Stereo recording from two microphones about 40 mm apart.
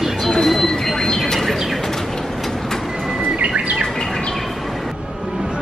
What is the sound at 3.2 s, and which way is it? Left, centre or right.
Bird, right.